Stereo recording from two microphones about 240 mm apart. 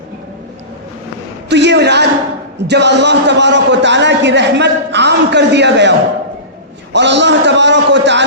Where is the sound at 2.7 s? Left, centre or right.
Right.